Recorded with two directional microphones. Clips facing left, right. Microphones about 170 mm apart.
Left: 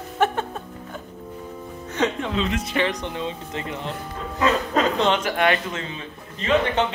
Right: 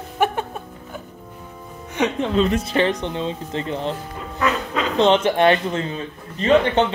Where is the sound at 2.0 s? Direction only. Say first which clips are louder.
Right 2 dB; 15° right (ahead or behind).